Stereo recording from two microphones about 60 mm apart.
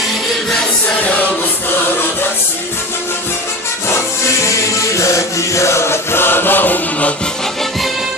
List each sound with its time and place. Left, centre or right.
0.9 s music: left
4.4 s music: left